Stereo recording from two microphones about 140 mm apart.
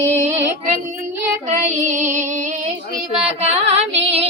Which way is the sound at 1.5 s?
60° right (ahead or behind).